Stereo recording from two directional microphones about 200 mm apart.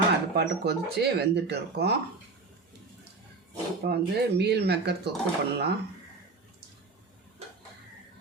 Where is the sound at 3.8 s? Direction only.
55° right (ahead or behind).